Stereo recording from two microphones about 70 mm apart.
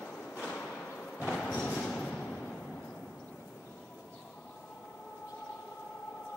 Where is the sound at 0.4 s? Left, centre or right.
Centre.